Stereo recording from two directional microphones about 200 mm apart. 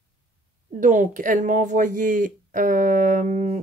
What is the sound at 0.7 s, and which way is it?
Speech, 40° right (ahead or behind).